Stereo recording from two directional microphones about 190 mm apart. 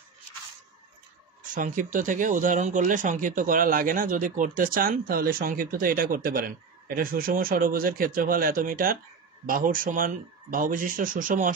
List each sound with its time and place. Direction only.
1.5 s speech: 45° right (ahead or behind)